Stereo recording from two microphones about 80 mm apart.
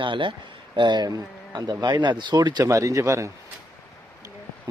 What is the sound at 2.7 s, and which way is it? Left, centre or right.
Speech, right.